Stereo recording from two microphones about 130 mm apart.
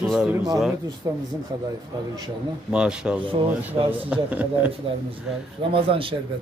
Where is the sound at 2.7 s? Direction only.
5° right (ahead or behind).